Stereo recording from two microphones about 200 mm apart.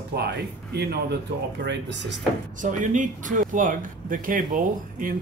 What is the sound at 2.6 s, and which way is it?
Speech, 40° right (ahead or behind).